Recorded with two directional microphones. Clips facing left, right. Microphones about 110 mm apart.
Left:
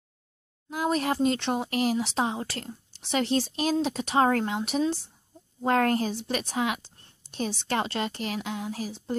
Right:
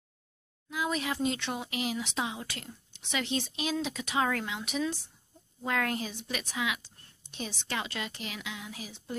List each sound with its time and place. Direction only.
0.7 s speech: 45° left (ahead or behind); by 5.1 s 30° left (ahead or behind)
5.6 s a woman's voice: 45° left (ahead or behind)
6.1 s speech: 35° left (ahead or behind)
6.8 s a sound: 35° left (ahead or behind)
7.5 s a woman's voice: 45° left (ahead or behind)